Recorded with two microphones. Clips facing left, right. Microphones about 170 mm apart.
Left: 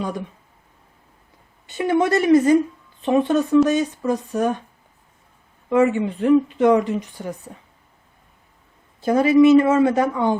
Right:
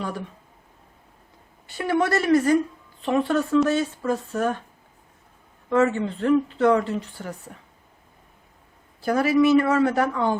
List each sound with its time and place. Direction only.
1.6 s speech: 20° left (ahead or behind)
5.6 s speech: 15° left (ahead or behind)
9.0 s speech: 20° left (ahead or behind)